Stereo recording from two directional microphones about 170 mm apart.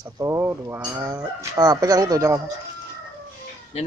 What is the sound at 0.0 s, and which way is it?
Speech, 15° right (ahead or behind).